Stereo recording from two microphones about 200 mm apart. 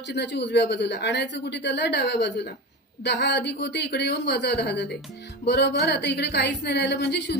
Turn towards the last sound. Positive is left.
turn(degrees=60)  # may be behind; listen again after turning